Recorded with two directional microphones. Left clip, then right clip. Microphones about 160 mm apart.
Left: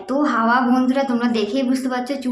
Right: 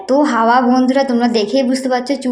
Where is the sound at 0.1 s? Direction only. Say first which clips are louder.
Right 6 dB; 30° right (ahead or behind).